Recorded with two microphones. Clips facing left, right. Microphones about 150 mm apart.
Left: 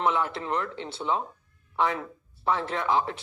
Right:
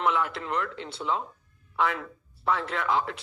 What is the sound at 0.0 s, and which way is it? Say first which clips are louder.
Speech: left 1 dB; 30° left (ahead or behind).